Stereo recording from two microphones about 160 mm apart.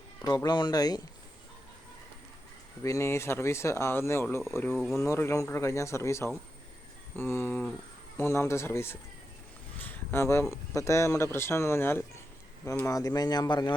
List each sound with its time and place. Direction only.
0.2 s speech: 20° left (ahead or behind)
2.8 s speech: 20° left (ahead or behind)